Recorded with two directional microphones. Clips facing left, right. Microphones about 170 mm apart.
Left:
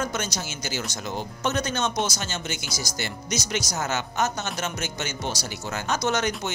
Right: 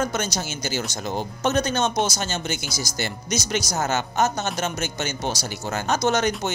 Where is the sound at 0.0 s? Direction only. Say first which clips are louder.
Right 4 dB; 40° right (ahead or behind).